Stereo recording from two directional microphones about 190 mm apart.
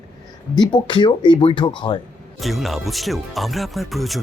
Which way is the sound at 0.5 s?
25° left (ahead or behind).